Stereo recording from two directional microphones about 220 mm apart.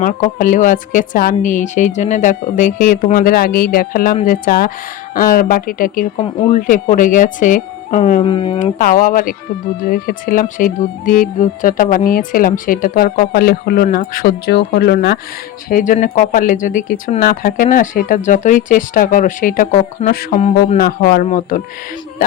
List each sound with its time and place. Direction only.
0.0 s speech: 35° left (ahead or behind)
8.3 s speech: 25° left (ahead or behind)
8.8 s speech: 40° left (ahead or behind)
15.7 s speech: 35° left (ahead or behind)